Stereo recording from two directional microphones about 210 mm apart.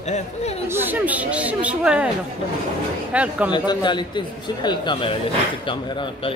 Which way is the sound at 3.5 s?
20° left (ahead or behind).